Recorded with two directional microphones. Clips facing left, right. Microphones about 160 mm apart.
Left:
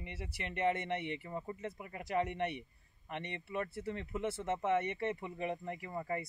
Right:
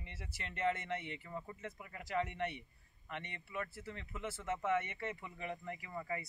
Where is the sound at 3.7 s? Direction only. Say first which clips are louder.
Left 8 dB; 30° left (ahead or behind).